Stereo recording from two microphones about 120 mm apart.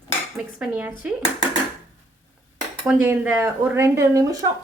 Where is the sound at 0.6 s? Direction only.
10° right (ahead or behind).